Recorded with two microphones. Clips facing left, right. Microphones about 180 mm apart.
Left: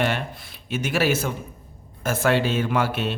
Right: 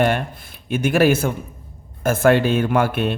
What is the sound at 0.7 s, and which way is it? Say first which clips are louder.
A man's voice: right 6 dB; 55° right (ahead or behind).